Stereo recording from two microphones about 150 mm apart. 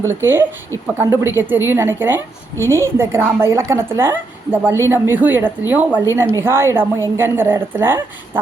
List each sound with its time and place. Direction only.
0.1 s a woman's voice: 15° right (ahead or behind)